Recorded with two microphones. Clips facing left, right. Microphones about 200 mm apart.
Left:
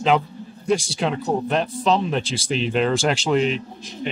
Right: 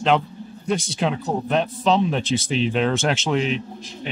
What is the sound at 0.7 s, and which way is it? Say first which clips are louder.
Speech: left 2 dB; centre (ahead or behind).